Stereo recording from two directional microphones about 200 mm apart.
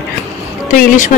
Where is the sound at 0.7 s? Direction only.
35° left (ahead or behind).